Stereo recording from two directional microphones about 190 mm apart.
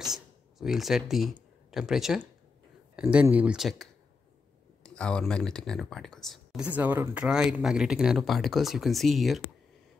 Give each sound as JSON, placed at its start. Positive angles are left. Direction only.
{"t": 0.0, "sound": "speech", "side_deg": 0}